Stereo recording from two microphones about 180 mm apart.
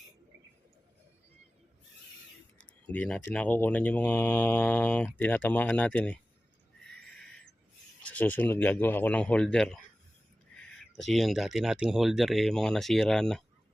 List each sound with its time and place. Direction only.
2.6 s speech: 10° left (ahead or behind)
8.0 s speech: 10° left (ahead or behind)
10.9 s speech: centre (ahead or behind)